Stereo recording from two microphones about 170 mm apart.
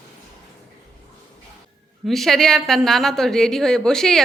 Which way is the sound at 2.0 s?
Centre (ahead or behind).